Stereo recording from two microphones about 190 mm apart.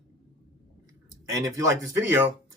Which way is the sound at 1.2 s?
15° right (ahead or behind).